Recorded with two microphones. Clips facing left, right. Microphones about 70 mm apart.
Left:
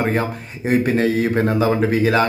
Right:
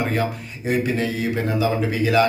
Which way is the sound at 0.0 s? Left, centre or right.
Left.